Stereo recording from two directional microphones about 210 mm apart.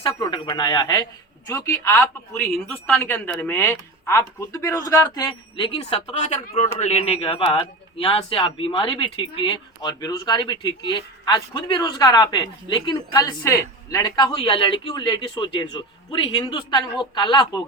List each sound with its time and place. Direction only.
0.0 s a woman's voice: 25° left (ahead or behind)